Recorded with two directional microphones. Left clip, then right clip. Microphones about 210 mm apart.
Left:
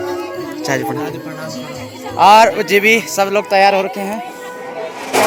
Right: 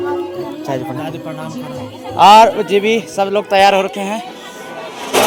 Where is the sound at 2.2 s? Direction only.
10° right (ahead or behind).